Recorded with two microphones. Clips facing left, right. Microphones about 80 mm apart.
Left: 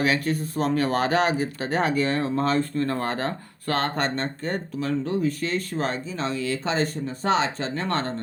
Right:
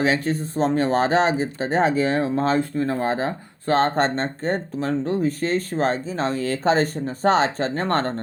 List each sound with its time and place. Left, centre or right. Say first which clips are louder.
0.0 s speech: right 2 dB; right